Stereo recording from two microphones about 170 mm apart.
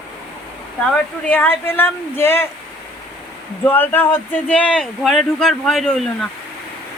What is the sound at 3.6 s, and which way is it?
A man's voice, 10° left (ahead or behind).